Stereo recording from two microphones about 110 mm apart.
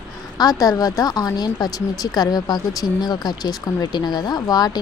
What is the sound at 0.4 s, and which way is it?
A woman's voice, 35° left (ahead or behind).